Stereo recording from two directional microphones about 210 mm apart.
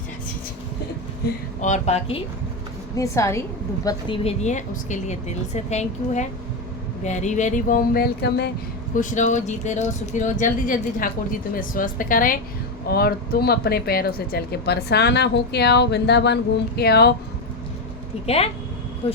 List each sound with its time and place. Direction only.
1.6 s speech: 35° left (ahead or behind)
2.9 s a woman's voice: 15° left (ahead or behind)
3.8 s speech: 25° left (ahead or behind); by 8.4 s 50° left (ahead or behind)
9.0 s speech: 35° left (ahead or behind)
19.0 s speech: 25° left (ahead or behind)